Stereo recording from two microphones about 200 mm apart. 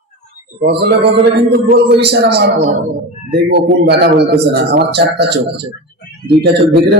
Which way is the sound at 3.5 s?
55° right (ahead or behind).